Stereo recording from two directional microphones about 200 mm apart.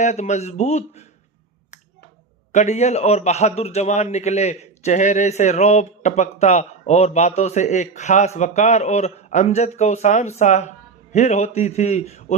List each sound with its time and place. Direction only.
0.0 s a man's voice: 35° left (ahead or behind)
2.5 s a man's voice: 35° left (ahead or behind)